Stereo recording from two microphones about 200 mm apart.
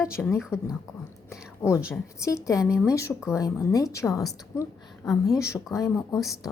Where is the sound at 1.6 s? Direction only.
10° left (ahead or behind).